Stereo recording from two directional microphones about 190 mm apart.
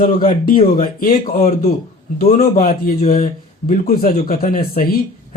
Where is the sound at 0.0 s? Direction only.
50° left (ahead or behind).